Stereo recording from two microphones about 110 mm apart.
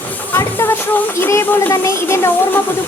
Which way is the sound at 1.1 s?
25° left (ahead or behind).